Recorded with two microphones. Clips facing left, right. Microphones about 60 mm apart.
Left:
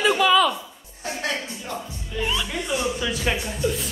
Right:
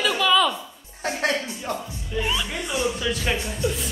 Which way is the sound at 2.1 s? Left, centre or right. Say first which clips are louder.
Even; centre.